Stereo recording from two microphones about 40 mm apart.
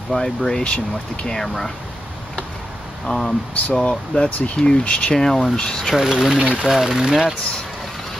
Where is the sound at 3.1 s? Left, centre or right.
Centre.